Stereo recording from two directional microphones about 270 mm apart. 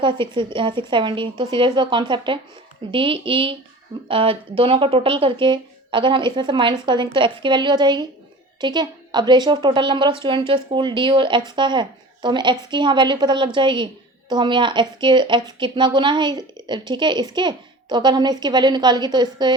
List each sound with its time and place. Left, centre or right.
0.0 s speech: centre